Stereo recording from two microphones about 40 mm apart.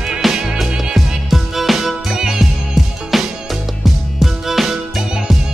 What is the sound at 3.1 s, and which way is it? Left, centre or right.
Music, centre.